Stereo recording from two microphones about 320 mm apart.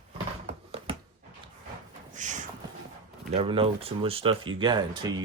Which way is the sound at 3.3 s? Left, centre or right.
Centre.